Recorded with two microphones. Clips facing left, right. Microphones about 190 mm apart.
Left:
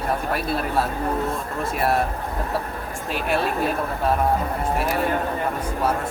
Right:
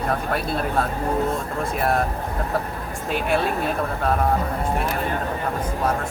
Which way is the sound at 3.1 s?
Centre (ahead or behind).